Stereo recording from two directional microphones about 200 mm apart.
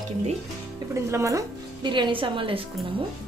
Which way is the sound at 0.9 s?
15° right (ahead or behind).